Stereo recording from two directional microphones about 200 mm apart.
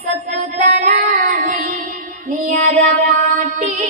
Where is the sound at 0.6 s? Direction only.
40° right (ahead or behind).